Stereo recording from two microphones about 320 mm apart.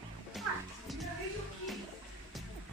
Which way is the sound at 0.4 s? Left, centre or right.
Centre.